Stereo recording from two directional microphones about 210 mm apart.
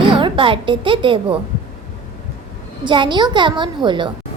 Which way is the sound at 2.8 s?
20° right (ahead or behind).